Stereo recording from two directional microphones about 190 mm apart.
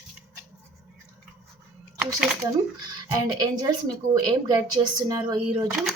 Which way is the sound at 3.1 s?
20° right (ahead or behind).